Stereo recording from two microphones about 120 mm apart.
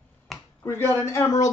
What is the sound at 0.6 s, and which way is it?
Speech, 20° left (ahead or behind).